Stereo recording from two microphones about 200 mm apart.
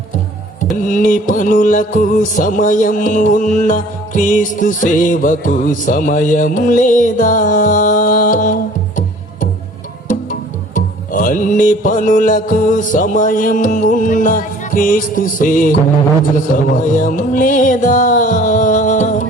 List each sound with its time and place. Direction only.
0.9 s music: 40° left (ahead or behind)
10.8 s music: 40° left (ahead or behind)